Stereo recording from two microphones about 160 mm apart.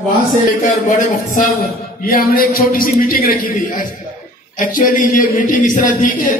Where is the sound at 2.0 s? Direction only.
65° left (ahead or behind).